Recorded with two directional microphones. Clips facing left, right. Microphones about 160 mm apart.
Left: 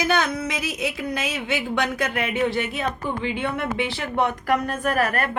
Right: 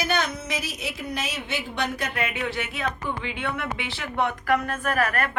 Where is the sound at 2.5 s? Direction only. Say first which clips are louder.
Left 4 dB; 40° left (ahead or behind).